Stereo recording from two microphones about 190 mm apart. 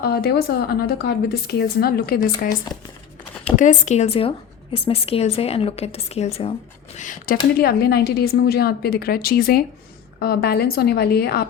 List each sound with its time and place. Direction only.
0.0 s speech: 55° left (ahead or behind)
7.6 s speech: 55° left (ahead or behind)